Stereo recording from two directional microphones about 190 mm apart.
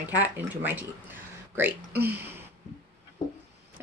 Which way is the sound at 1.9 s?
55° right (ahead or behind).